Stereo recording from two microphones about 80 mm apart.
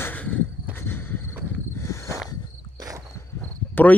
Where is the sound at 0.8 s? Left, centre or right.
Left.